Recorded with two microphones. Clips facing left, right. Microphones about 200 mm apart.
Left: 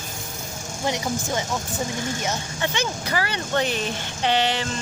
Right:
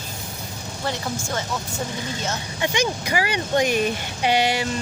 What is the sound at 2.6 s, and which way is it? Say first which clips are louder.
Speech: right 5 dB; 15° right (ahead or behind).